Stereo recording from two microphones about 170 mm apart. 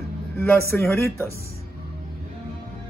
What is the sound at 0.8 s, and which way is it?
Speech, 15° left (ahead or behind).